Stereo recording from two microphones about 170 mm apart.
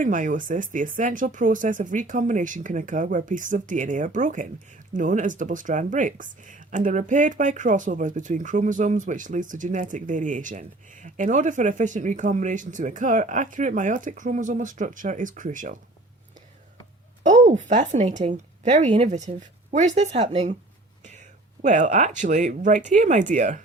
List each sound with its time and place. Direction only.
0.0 s speech: 50° right (ahead or behind)
17.2 s speech: 45° right (ahead or behind)